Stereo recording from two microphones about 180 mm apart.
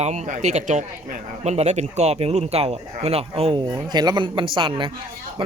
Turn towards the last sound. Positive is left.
turn(degrees=-30)  # may be behind; listen again after turning